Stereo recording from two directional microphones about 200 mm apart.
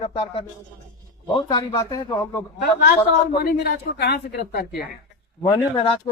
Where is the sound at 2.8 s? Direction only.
50° left (ahead or behind).